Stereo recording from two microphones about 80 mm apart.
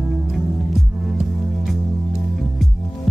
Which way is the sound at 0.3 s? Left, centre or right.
Centre.